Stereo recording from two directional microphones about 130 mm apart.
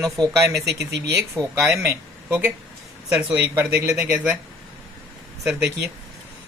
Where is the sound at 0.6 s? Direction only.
25° right (ahead or behind).